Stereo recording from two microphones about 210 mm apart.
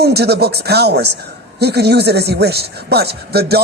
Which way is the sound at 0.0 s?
50° right (ahead or behind).